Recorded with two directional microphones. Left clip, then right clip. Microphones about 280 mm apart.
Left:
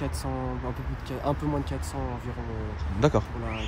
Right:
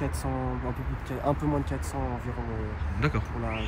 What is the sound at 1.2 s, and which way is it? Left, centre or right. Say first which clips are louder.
Speech: right 1 dB; centre.